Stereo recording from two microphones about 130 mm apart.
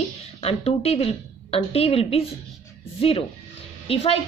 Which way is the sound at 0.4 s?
50° left (ahead or behind).